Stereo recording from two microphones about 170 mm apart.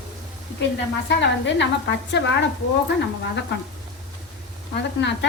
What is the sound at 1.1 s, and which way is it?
A woman's voice, 90° left.